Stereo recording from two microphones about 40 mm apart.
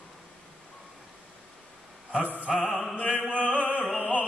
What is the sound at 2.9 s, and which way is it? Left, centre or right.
Music, left.